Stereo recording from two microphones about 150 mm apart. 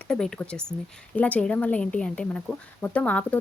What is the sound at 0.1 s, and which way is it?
Speech, 5° left (ahead or behind).